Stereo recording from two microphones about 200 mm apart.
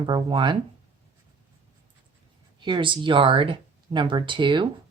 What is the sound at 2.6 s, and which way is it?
A woman's voice, 25° right (ahead or behind).